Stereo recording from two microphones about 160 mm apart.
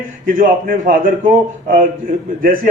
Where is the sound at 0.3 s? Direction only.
60° right (ahead or behind).